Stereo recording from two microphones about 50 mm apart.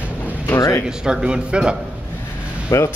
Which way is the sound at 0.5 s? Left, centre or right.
Left.